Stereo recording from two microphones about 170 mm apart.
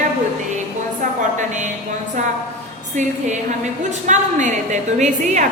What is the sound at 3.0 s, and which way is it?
A woman's voice, 45° right (ahead or behind).